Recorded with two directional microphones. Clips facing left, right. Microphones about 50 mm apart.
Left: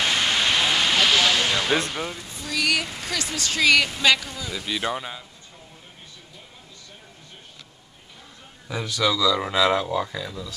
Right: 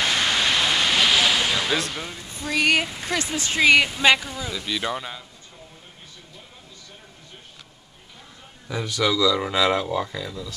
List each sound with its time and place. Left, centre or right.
0.0 s a sound: left
0.4 s a sound: centre
1.7 s speech: left
2.4 s speech: right
4.5 s speech: centre
8.8 s speech: right
9.2 s speech: centre